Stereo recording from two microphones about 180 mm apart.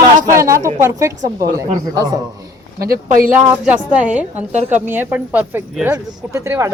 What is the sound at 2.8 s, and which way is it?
Speech, 55° right (ahead or behind).